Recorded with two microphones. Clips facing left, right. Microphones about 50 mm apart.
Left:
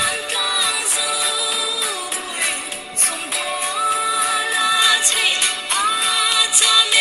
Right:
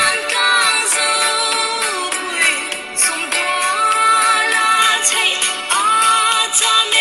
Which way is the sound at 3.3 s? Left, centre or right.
Right.